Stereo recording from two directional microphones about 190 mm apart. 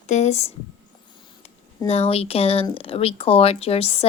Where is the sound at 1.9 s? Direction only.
30° left (ahead or behind).